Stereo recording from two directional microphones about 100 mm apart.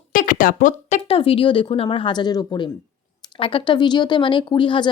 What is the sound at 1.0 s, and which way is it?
Speech, 70° left (ahead or behind).